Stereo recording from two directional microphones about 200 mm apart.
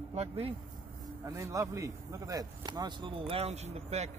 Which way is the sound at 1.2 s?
15° right (ahead or behind).